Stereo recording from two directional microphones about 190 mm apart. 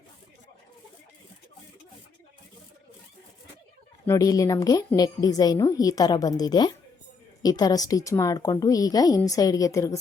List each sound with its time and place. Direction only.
4.0 s a woman's voice: 15° left (ahead or behind)